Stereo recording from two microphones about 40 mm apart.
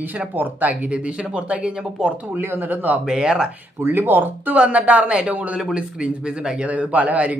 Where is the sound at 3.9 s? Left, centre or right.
Right.